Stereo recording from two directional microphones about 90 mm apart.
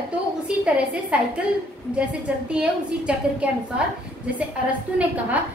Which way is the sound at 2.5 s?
10° right (ahead or behind).